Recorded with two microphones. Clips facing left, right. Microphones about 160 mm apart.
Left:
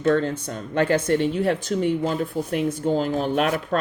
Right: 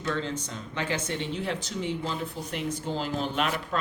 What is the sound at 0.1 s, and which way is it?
A woman's voice, 50° left (ahead or behind).